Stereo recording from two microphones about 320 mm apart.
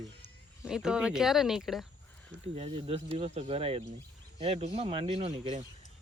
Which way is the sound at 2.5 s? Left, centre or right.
Centre.